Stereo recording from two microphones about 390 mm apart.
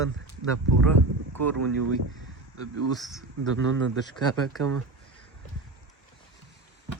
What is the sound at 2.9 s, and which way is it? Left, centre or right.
Speech, centre.